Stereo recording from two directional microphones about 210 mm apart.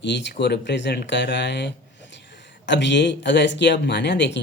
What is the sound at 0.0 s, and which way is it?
Speech, 55° left (ahead or behind).